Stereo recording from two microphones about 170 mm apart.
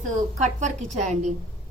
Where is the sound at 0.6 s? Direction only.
45° right (ahead or behind).